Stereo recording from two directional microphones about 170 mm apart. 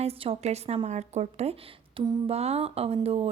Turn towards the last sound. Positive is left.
turn(degrees=-35)  # may be behind; listen again after turning